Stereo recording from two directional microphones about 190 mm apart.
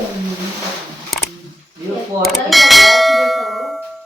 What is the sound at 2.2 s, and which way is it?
Bell, centre (ahead or behind).